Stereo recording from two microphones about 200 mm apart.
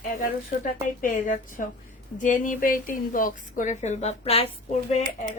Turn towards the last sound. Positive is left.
turn(degrees=35)  # may be behind; listen again after turning